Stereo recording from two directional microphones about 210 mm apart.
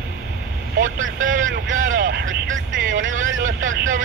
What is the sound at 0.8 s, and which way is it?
Vehicle, 65° right (ahead or behind).